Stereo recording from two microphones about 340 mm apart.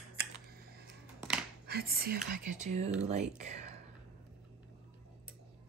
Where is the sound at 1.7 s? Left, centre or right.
Right.